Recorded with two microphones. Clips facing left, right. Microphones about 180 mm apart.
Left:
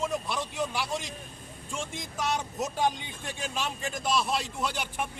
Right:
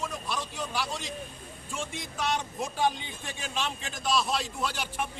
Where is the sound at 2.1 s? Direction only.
5° left (ahead or behind).